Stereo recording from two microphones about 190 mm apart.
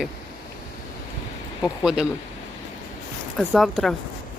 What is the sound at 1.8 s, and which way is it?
Speech, 5° right (ahead or behind).